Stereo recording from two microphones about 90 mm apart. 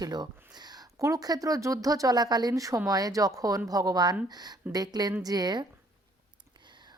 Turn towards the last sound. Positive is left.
turn(degrees=-50)  # may be behind; listen again after turning